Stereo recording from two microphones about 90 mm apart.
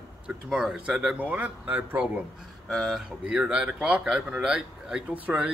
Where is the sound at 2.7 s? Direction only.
5° left (ahead or behind).